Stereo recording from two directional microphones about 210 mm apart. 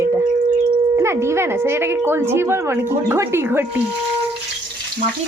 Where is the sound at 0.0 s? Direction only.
10° right (ahead or behind).